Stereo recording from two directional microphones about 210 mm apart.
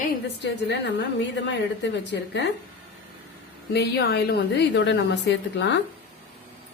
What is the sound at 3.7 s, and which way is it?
A woman's voice, 50° left (ahead or behind).